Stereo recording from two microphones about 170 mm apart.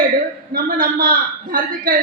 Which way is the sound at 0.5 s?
60° right (ahead or behind).